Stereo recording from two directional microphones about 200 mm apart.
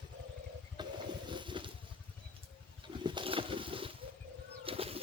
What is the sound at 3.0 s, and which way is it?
Boat, 25° right (ahead or behind).